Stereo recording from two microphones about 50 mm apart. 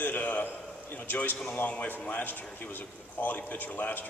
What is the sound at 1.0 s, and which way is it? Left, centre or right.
A man's voice, left.